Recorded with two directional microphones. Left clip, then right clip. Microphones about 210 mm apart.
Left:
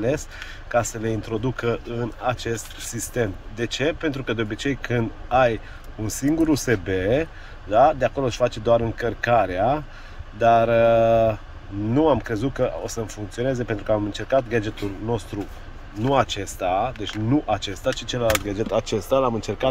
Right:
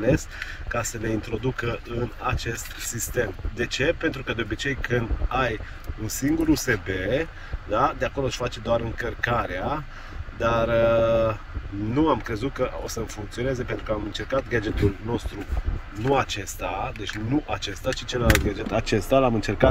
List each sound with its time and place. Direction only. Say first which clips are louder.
0.7 s speech: left 6 dB; 10° left (ahead or behind)
16.1 s speech: left 2 dB; 10° left (ahead or behind)
18.9 s speech: right 4 dB; centre (ahead or behind)